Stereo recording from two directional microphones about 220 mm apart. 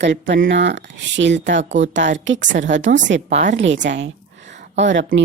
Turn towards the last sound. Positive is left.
turn(degrees=-55)  # may be behind; listen again after turning